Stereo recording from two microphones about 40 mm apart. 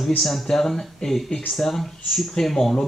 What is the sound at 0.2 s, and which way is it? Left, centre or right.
Speech, centre.